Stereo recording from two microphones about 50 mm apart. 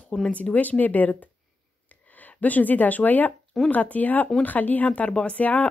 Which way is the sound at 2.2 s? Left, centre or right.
Left.